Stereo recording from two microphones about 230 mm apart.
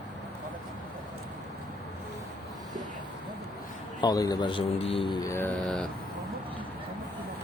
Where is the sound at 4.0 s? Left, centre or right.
Centre.